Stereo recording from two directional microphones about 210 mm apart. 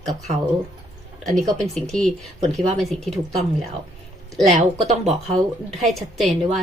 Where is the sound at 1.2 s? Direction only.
Centre (ahead or behind).